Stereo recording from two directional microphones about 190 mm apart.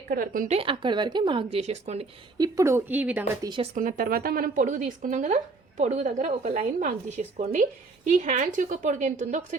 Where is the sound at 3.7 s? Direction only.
45° right (ahead or behind).